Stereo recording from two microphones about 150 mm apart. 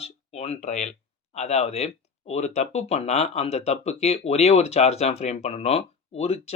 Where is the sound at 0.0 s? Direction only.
45° left (ahead or behind).